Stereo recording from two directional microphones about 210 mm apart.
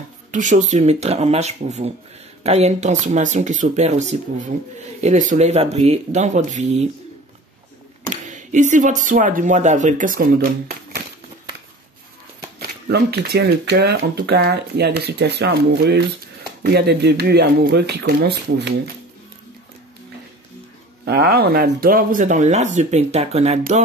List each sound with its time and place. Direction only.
0.3 s speech: 35° right (ahead or behind)
8.1 s speech: 35° right (ahead or behind)
12.5 s speech: 50° right (ahead or behind)
21.0 s speech: 50° right (ahead or behind); by 23.6 s 30° right (ahead or behind)